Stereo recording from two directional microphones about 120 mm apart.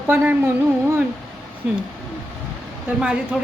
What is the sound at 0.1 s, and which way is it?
Speech, 15° right (ahead or behind).